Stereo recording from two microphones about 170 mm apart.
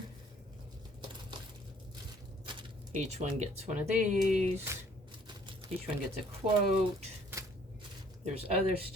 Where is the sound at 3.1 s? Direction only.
40° right (ahead or behind).